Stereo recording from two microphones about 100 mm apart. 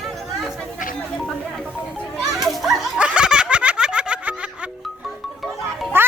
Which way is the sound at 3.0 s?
10° right (ahead or behind).